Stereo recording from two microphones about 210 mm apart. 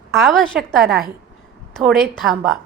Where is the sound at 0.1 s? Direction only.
Centre (ahead or behind).